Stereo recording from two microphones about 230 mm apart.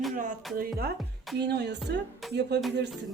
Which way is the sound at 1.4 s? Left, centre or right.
Right.